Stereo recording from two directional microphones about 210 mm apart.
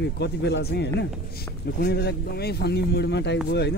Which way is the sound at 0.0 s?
55° left (ahead or behind).